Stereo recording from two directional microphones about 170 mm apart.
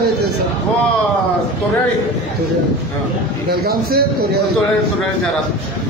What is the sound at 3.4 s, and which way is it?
Speech, 65° right (ahead or behind).